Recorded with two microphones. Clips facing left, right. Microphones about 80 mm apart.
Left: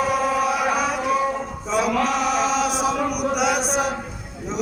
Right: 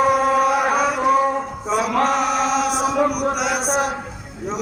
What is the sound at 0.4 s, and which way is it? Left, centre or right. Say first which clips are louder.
Chant: right 3 dB; right.